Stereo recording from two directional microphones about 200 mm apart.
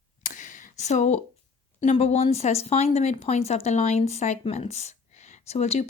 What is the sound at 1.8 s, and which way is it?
Speech, 35° left (ahead or behind).